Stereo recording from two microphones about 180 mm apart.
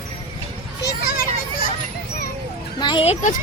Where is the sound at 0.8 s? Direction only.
60° left (ahead or behind).